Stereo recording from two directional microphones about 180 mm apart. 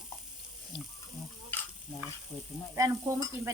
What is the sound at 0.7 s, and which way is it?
Water tap, 25° left (ahead or behind).